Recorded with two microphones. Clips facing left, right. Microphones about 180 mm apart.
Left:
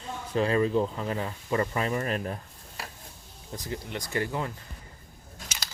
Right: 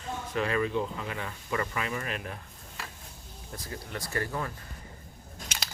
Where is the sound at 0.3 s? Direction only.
30° left (ahead or behind).